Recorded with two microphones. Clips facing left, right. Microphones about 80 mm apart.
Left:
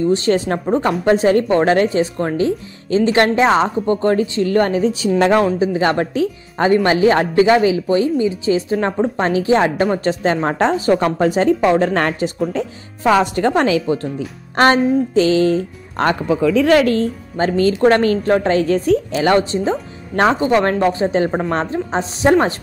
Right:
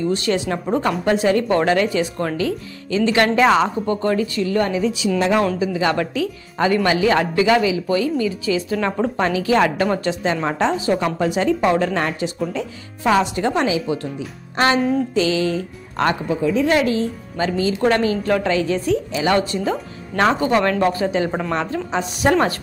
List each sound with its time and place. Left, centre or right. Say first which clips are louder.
0.0 s speech: left 5 dB; left
0.7 s speech: left 3 dB; left
1.0 s speech: left 5 dB; left
8.9 s speech: left 3 dB; left
9.2 s speech: left 2 dB; left
10.0 s speech: left 4 dB; left
11.9 s speech: left 4 dB; left
12.2 s speech: left 4 dB; left
15.1 s speech: left 5 dB; left
16.3 s speech: left 8 dB; left
18.2 s speech: left 4 dB; left
19.3 s speech: left 3 dB; left